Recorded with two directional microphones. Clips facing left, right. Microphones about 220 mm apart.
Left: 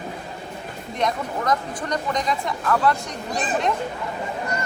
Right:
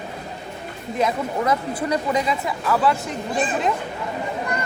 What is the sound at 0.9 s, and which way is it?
Speech, 5° right (ahead or behind).